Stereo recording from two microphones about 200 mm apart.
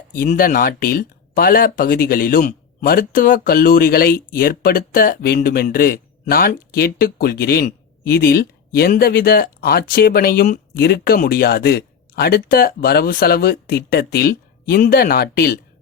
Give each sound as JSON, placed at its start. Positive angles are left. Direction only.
{"t": 0.2, "sound": "speech", "side_deg": 45}